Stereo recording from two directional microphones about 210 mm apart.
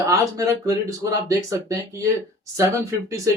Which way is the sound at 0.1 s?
15° right (ahead or behind).